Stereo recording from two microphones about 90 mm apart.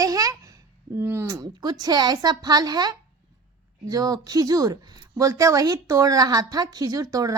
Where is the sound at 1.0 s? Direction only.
25° right (ahead or behind).